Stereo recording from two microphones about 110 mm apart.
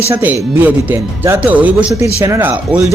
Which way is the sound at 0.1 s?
15° right (ahead or behind).